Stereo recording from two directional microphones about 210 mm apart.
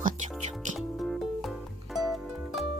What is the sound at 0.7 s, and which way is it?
Music, centre (ahead or behind).